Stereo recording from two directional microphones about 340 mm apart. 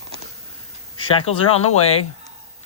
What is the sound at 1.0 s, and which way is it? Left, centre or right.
Speech, centre.